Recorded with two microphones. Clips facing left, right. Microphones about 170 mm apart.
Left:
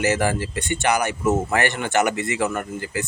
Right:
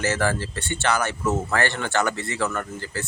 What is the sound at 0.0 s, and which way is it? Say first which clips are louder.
Speech: left 3 dB; 15° left (ahead or behind).